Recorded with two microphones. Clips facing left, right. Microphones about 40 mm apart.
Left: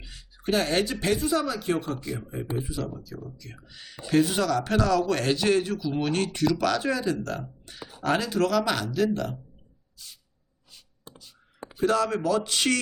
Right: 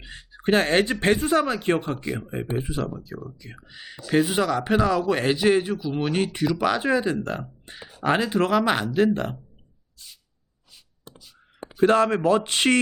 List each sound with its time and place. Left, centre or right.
0.0 s speech: right
2.9 s speech: right
11.8 s speech: right